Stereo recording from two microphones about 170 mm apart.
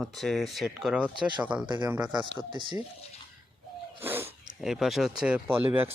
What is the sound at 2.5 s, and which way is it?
Speech, 30° right (ahead or behind).